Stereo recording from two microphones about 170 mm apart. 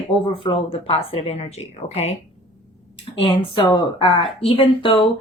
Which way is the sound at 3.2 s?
30° left (ahead or behind).